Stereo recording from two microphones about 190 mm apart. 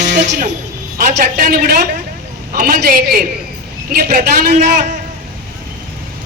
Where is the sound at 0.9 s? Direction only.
50° right (ahead or behind).